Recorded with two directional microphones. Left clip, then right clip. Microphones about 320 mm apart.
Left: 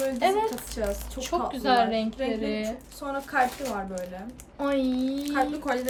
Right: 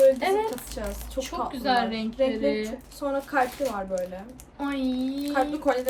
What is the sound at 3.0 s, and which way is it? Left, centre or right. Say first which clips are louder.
Speech: right 4 dB; centre.